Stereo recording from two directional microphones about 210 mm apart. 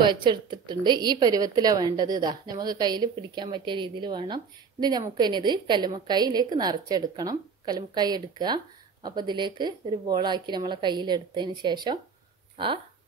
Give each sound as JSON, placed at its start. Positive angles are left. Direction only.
{"t": 0.0, "sound": "a woman's voice", "side_deg": -20}